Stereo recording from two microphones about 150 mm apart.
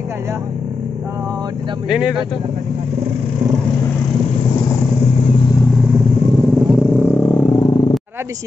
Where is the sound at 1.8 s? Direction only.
5° right (ahead or behind).